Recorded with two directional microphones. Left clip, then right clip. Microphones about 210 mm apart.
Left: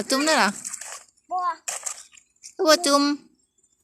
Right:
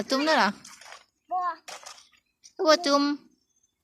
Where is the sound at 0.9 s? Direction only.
10° left (ahead or behind).